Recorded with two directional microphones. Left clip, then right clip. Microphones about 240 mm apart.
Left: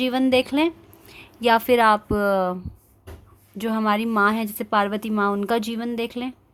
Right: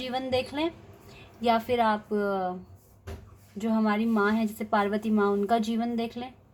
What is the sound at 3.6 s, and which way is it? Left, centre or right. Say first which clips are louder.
A woman's voice: left 5 dB; left.